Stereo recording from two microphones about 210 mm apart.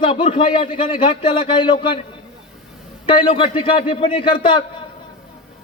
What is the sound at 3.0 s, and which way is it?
A man's voice, 25° left (ahead or behind).